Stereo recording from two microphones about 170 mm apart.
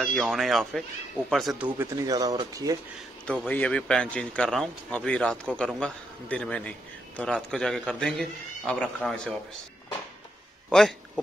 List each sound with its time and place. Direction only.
0.0 s a man's voice: 5° left (ahead or behind)
1.8 s speech: 20° right (ahead or behind)
3.3 s a man's voice: 10° left (ahead or behind)
10.7 s speech: centre (ahead or behind)